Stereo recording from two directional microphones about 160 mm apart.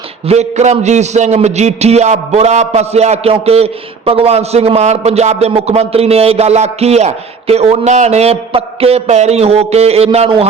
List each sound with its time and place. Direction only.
0.3 s a man's voice: 45° right (ahead or behind)